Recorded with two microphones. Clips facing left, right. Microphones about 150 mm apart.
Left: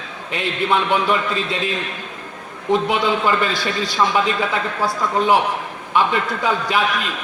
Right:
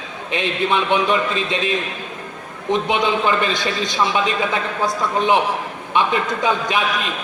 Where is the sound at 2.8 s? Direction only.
20° right (ahead or behind).